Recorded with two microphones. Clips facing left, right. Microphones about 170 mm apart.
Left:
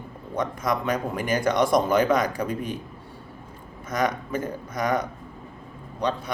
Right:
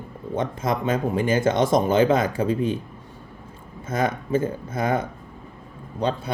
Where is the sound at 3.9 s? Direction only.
25° right (ahead or behind).